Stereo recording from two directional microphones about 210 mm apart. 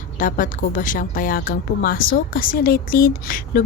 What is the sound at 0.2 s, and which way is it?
Speech, 40° left (ahead or behind).